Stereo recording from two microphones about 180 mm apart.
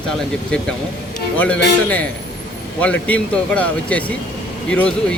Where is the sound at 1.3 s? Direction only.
10° left (ahead or behind).